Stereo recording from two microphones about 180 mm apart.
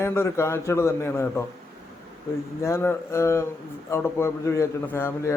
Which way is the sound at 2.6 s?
15° left (ahead or behind).